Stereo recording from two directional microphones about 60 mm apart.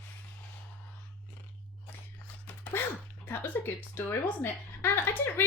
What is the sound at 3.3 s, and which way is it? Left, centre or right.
A woman's voice, left.